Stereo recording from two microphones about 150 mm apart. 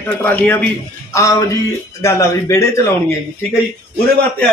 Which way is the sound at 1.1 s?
20° left (ahead or behind).